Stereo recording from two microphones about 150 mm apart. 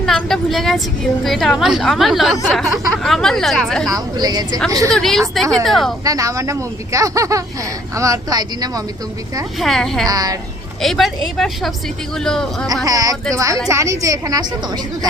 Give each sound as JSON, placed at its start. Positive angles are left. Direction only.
{"t": 0.0, "sound": "a woman's voice", "side_deg": 0}
{"t": 3.9, "sound": "speech", "side_deg": -25}
{"t": 4.9, "sound": "speech", "side_deg": 5}
{"t": 6.1, "sound": "speech", "side_deg": -25}
{"t": 9.6, "sound": "speech", "side_deg": 0}
{"t": 10.1, "sound": "speech", "side_deg": -25}
{"t": 10.8, "sound": "speech", "side_deg": 0}
{"t": 12.8, "sound": "speech", "side_deg": -25}